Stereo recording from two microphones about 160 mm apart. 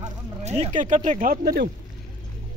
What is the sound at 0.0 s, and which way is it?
Speech, 45° right (ahead or behind).